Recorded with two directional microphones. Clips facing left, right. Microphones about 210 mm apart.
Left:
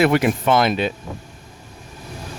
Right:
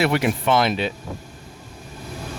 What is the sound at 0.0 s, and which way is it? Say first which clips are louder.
Speech: left 3 dB; 45° left (ahead or behind).